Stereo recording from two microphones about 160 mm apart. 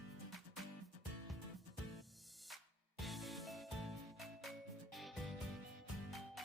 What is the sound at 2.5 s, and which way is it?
Music, centre (ahead or behind).